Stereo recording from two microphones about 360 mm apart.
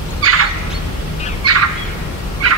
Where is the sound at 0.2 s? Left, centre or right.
Right.